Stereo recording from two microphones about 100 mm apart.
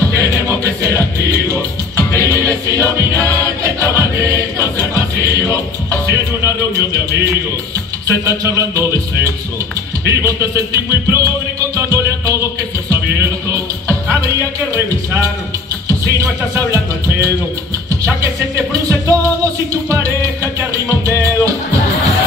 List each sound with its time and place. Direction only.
0.2 s music: 30° right (ahead or behind)
8.3 s a sound: 35° right (ahead or behind)
10.0 s music: 30° right (ahead or behind)
15.9 s music: 30° right (ahead or behind)